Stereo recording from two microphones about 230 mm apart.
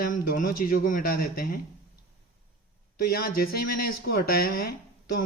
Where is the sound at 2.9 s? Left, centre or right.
Left.